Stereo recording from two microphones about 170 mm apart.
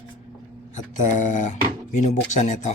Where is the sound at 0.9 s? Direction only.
45° left (ahead or behind).